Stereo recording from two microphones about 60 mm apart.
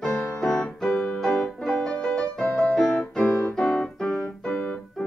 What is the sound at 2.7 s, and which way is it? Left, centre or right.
Keyboard, centre.